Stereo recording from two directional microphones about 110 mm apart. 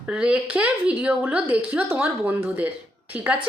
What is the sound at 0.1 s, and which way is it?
Speech, 10° right (ahead or behind).